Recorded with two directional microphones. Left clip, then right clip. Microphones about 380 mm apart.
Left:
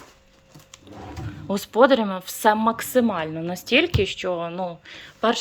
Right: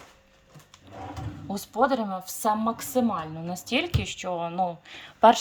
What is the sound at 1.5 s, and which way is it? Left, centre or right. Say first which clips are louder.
A woman's voice: left 7 dB; centre.